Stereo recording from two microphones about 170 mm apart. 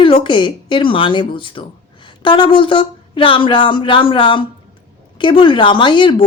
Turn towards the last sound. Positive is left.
turn(degrees=30)  # may be behind; listen again after turning